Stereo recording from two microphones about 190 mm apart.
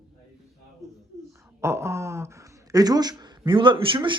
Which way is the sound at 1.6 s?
15° right (ahead or behind).